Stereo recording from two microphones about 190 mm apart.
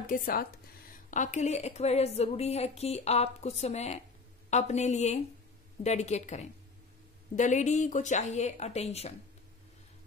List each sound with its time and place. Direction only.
0.0 s speech: 45° left (ahead or behind)